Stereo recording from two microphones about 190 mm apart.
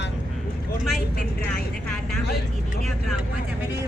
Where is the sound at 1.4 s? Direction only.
5° left (ahead or behind).